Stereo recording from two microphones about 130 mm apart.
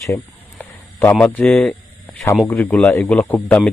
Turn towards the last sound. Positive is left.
turn(degrees=10)  # may be behind; listen again after turning